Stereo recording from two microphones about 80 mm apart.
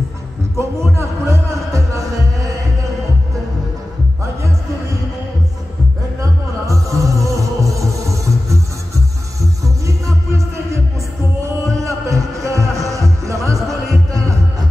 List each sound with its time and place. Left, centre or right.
0.6 s music: right
6.7 s music: right
11.8 s music: right